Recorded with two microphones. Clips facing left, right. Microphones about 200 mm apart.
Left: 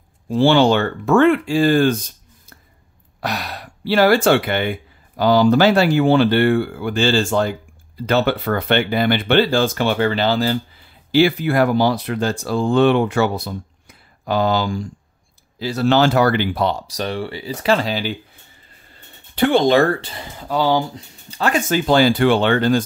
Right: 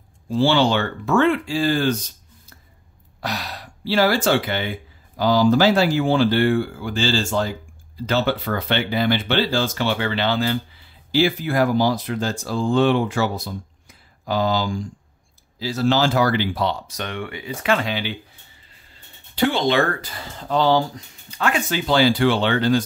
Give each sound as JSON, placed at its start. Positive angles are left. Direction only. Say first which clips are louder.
{"t": 0.3, "sound": "speech", "louder": "left 4 dB", "side_deg": 55}
{"t": 3.2, "sound": "speech", "louder": "left 3 dB", "side_deg": 60}
{"t": 11.1, "sound": "speech", "louder": "left 4 dB", "side_deg": 65}
{"t": 16.9, "sound": "speech", "louder": "left 5 dB", "side_deg": 35}
{"t": 19.3, "sound": "speech", "louder": "left 5 dB", "side_deg": 50}
{"t": 20.2, "sound": "speech", "louder": "even", "side_deg": 10}
{"t": 20.9, "sound": "speech", "louder": "left 2 dB", "side_deg": 35}